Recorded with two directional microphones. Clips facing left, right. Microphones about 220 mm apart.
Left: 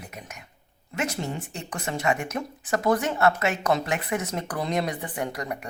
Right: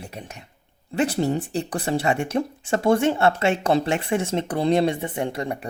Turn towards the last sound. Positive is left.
turn(degrees=-30)  # may be behind; listen again after turning